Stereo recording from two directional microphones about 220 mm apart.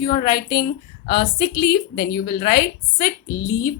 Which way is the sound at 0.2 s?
45° left (ahead or behind).